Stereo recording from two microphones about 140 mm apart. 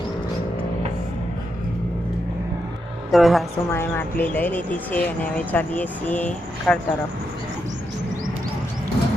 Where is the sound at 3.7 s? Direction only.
15° left (ahead or behind).